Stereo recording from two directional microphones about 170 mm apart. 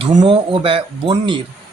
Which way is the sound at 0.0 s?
30° right (ahead or behind).